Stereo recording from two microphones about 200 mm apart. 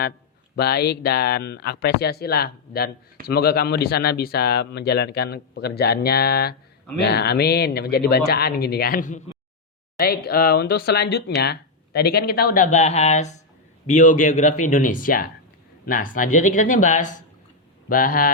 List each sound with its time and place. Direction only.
0.5 s speech: 50° left (ahead or behind)